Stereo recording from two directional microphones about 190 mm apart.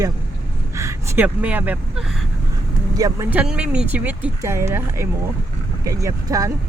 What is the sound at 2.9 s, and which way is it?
Speech, 20° right (ahead or behind).